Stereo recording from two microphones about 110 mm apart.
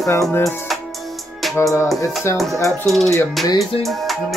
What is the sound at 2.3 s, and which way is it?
Speech, 25° left (ahead or behind).